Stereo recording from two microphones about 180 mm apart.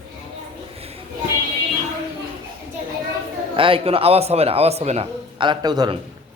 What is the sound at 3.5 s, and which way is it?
Speech, 30° right (ahead or behind).